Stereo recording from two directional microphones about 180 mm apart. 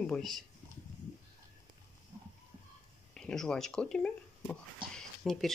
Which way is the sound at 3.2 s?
5° left (ahead or behind).